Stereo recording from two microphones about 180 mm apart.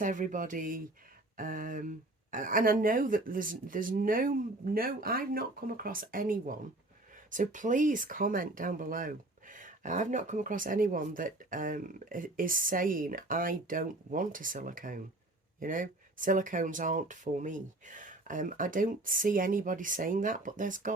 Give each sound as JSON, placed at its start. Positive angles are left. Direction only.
{"t": 0.0, "sound": "speech", "side_deg": -45}